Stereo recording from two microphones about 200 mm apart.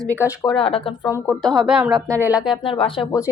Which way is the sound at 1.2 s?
Centre (ahead or behind).